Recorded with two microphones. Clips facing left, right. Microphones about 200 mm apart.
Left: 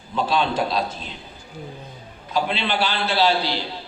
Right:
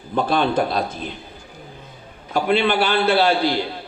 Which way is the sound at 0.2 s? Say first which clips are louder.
Right 3 dB; 55° right (ahead or behind).